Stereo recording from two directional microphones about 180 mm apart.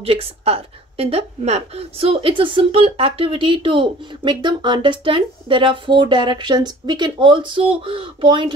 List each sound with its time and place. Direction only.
0.0 s a woman's voice: 30° right (ahead or behind)